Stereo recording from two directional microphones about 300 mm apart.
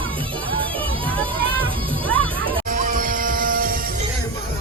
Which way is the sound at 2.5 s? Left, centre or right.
Right.